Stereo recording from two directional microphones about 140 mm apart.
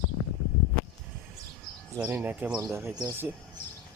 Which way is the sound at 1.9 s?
15° right (ahead or behind).